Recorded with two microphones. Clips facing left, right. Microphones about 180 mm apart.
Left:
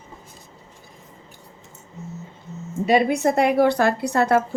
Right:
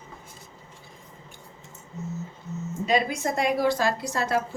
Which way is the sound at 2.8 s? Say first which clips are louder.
Left 7 dB; 60° left (ahead or behind).